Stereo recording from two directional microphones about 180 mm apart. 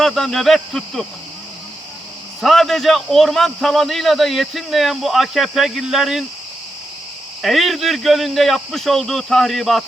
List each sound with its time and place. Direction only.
0.0 s a man's voice: centre (ahead or behind)
2.4 s a man's voice: centre (ahead or behind)
7.4 s a man's voice: centre (ahead or behind)